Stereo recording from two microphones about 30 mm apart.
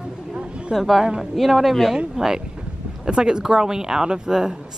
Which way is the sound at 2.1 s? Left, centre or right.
Centre.